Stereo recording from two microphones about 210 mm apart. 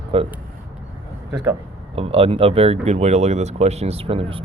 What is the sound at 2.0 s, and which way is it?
Speech, 25° right (ahead or behind).